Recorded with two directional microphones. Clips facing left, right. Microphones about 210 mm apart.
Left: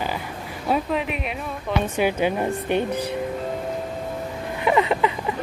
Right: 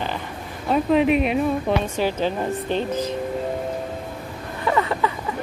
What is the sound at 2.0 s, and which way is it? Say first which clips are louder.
Speech: left 1 dB; 15° left (ahead or behind).